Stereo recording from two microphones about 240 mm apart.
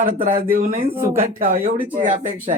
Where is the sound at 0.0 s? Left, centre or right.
Right.